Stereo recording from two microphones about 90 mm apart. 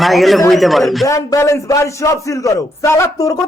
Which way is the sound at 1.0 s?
35° left (ahead or behind).